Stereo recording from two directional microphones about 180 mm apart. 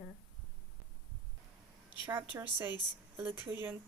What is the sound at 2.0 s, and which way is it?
A woman's voice, 10° right (ahead or behind).